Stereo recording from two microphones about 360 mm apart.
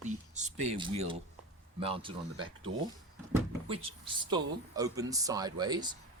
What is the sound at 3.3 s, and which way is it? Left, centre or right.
Speech, centre.